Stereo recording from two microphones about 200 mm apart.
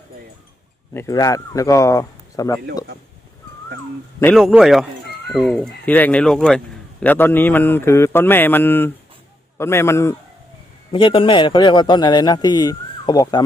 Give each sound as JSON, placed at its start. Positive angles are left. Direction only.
{"t": 0.9, "sound": "speech", "side_deg": 15}
{"t": 4.4, "sound": "speech", "side_deg": 0}
{"t": 10.9, "sound": "a man's voice", "side_deg": 25}